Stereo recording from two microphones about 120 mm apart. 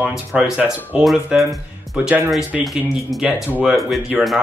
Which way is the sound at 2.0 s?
15° right (ahead or behind).